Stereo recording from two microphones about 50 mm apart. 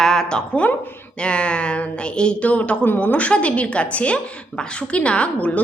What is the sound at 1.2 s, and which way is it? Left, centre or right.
A woman's voice, left.